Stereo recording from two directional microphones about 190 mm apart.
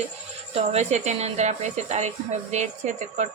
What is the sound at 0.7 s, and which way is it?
Speech, 35° right (ahead or behind).